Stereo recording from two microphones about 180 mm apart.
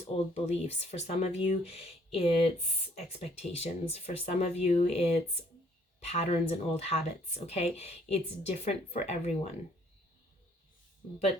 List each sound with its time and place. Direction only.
0.0 s speech: 35° left (ahead or behind)